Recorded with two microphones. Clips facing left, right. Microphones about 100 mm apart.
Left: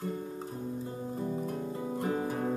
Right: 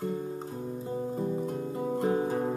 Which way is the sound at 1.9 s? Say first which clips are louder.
Right 5 dB; 25° right (ahead or behind).